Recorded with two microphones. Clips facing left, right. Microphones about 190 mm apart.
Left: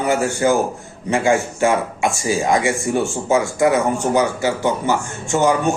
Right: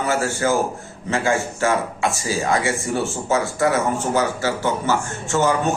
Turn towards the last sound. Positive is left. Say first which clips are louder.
# left 3 dB
turn(degrees=15)  # may be behind; listen again after turning